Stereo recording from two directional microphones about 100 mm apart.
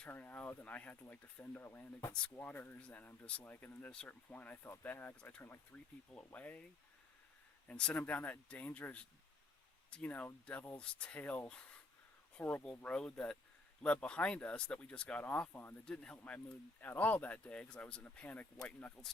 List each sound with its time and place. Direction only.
0.0 s speech: 15° left (ahead or behind)
7.7 s speech: 10° left (ahead or behind)